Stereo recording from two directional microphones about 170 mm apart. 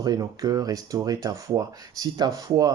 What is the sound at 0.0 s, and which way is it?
A man's voice, 25° right (ahead or behind).